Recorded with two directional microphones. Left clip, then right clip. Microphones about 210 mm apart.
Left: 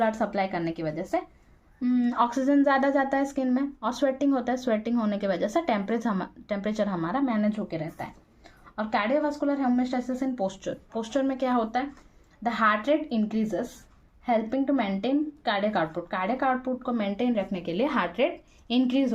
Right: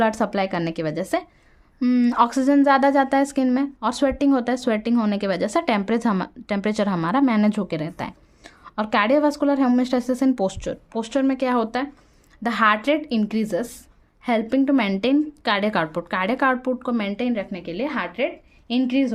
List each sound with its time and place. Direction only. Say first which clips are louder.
0.0 s a woman's voice: right 5 dB; 45° right (ahead or behind); by 17.4 s 20° right (ahead or behind)
17.5 s a woman's voice: even; 5° right (ahead or behind)
18.7 s speech: right 3 dB; 20° right (ahead or behind)